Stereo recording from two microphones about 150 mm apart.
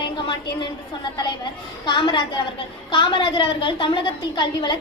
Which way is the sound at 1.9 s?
30° left (ahead or behind).